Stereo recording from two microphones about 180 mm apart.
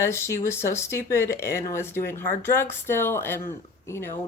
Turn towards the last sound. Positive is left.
turn(degrees=15)  # may be behind; listen again after turning